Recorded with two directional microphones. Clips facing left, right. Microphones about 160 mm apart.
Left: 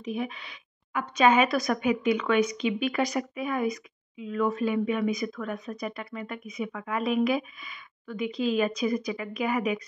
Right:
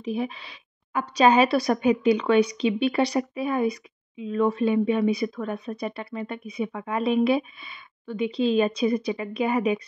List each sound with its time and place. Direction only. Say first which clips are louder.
0.0 s a woman's voice: right 4 dB; 30° right (ahead or behind)